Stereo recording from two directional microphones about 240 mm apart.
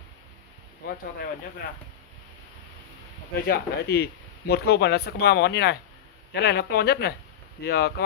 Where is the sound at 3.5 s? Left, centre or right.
Left.